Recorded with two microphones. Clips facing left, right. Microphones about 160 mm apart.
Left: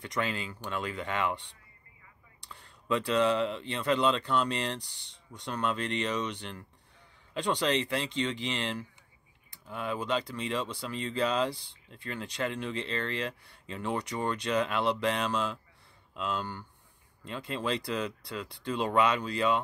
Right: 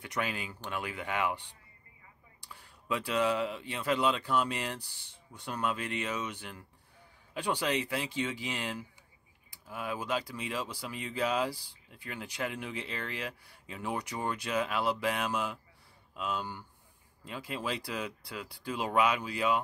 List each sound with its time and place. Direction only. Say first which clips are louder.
0.0 s speech: left 2 dB; 10° right (ahead or behind)
2.5 s speech: left 4 dB; 5° right (ahead or behind)
4.8 s speech: left 1 dB; 65° left (ahead or behind)
5.3 s speech: left 2 dB; 5° right (ahead or behind)